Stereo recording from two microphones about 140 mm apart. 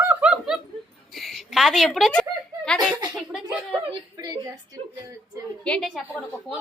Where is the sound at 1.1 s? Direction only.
Centre (ahead or behind).